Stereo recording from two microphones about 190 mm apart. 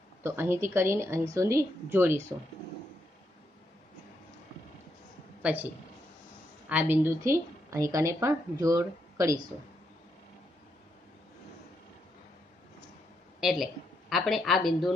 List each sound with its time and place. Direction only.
0.2 s a woman's voice: 15° right (ahead or behind)
5.4 s speech: 10° right (ahead or behind)
6.7 s a woman's voice: 10° right (ahead or behind)
13.4 s speech: centre (ahead or behind)